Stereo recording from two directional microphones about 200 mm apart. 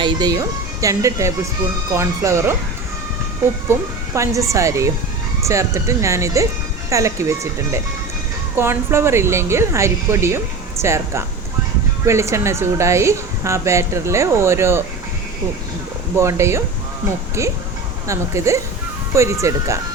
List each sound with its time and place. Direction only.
0.0 s a woman's voice: 20° right (ahead or behind)
3.7 s a woman's voice: 15° right (ahead or behind)
16.1 s a woman's voice: 15° right (ahead or behind)
18.1 s a woman's voice: 15° right (ahead or behind)